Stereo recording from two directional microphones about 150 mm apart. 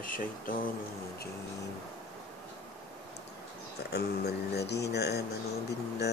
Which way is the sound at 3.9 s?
90° left.